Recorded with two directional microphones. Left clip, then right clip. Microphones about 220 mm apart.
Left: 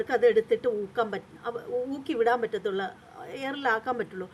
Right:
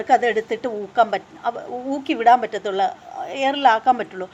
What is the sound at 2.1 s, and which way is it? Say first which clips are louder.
Speech: right 11 dB; 40° right (ahead or behind).